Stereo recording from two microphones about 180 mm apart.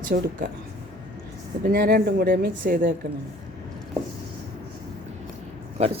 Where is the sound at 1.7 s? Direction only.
55° right (ahead or behind).